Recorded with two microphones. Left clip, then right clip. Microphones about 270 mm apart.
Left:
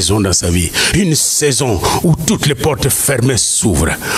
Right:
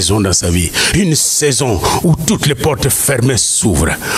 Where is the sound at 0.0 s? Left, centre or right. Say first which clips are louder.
Even; left.